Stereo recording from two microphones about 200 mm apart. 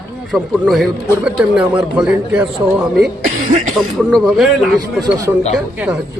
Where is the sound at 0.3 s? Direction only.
Centre (ahead or behind).